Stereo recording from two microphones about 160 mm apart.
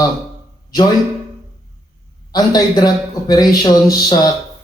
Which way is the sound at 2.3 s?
25° left (ahead or behind).